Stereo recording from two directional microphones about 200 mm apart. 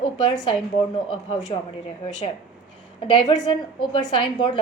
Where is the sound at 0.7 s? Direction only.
25° left (ahead or behind).